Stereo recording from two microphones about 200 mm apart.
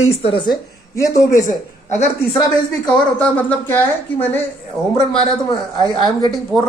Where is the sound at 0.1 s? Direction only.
30° left (ahead or behind).